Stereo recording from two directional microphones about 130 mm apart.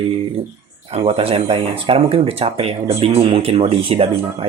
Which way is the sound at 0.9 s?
50° right (ahead or behind).